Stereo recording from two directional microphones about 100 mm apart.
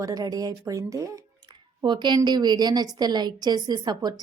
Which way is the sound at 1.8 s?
50° right (ahead or behind).